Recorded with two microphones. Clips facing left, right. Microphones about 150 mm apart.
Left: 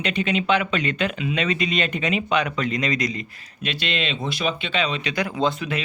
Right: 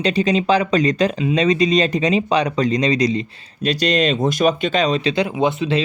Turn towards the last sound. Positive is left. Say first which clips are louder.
# right 5 dB
turn(degrees=-20)  # may be behind; listen again after turning